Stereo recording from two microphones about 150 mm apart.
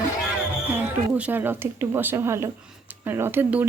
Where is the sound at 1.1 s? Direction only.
10° right (ahead or behind).